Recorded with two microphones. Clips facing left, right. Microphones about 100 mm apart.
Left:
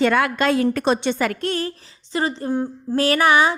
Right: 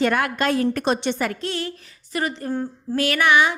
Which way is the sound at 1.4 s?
40° left (ahead or behind).